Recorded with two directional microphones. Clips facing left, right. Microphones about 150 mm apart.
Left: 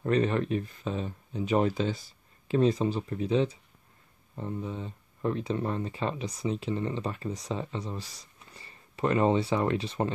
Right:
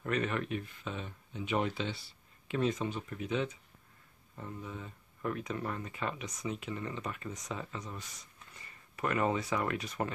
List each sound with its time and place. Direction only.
0.0 s speech: 30° left (ahead or behind)